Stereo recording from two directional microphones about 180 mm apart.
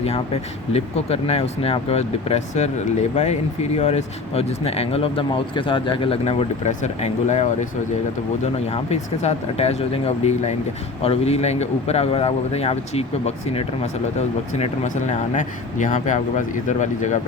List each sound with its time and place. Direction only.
0.7 s speech: 35° left (ahead or behind)
8.7 s speech: 35° left (ahead or behind)